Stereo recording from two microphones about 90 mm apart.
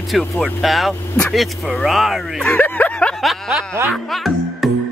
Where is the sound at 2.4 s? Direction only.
20° left (ahead or behind).